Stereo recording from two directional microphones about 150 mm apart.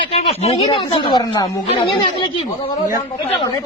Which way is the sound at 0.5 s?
30° left (ahead or behind).